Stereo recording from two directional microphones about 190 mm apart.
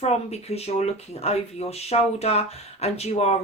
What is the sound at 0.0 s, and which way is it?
Speech, 35° left (ahead or behind).